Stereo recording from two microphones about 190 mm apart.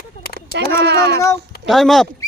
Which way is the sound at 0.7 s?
60° right (ahead or behind).